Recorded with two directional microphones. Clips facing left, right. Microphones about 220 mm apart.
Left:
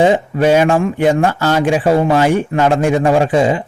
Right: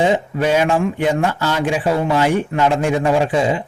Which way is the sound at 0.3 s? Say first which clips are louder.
Left 4 dB; 45° left (ahead or behind).